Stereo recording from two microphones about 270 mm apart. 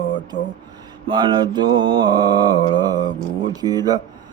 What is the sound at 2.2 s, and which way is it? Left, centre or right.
Mantra, centre.